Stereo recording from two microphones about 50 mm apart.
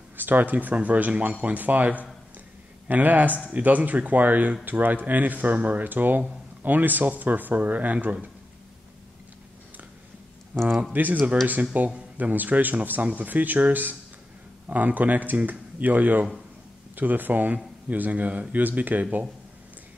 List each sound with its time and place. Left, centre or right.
0.2 s a man's voice: right
10.5 s a man's voice: right